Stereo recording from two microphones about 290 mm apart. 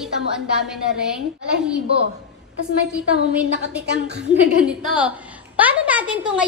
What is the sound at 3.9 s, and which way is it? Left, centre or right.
Speech, right.